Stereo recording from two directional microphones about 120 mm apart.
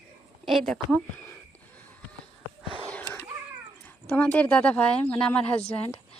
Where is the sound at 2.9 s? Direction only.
15° left (ahead or behind).